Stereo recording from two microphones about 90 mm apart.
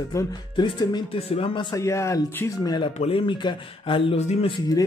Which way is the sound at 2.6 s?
55° left (ahead or behind).